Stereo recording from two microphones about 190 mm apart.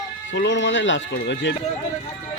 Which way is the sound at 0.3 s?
75° left (ahead or behind).